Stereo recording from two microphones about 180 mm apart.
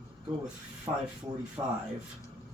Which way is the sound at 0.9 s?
25° right (ahead or behind).